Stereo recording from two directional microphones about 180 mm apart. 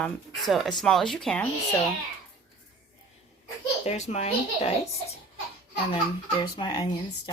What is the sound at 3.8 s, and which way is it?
Speech, 40° left (ahead or behind).